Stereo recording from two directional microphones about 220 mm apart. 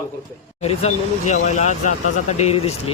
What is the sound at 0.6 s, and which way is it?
Speech, 30° left (ahead or behind).